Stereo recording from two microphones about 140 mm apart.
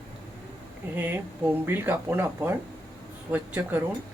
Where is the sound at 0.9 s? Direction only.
15° right (ahead or behind).